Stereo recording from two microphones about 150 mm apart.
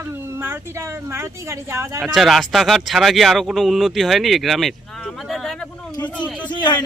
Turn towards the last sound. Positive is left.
turn(degrees=30)  # may be behind; listen again after turning